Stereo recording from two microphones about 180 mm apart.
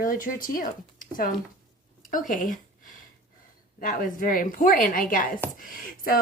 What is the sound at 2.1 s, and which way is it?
Speech, 45° left (ahead or behind).